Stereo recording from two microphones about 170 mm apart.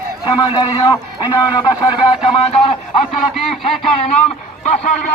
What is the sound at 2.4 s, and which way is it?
Speech, 35° left (ahead or behind).